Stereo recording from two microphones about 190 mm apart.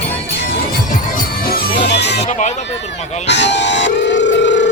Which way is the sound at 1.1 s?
50° left (ahead or behind).